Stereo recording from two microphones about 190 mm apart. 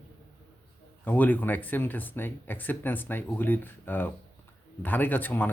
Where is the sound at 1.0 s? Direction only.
10° left (ahead or behind).